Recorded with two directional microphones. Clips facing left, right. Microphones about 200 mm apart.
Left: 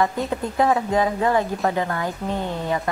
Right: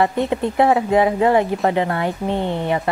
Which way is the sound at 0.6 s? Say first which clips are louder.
Right 4 dB; 25° right (ahead or behind).